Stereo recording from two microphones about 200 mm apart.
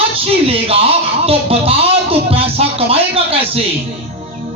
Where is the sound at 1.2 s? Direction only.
30° right (ahead or behind).